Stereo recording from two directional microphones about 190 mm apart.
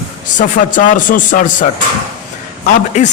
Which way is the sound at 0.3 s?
45° left (ahead or behind).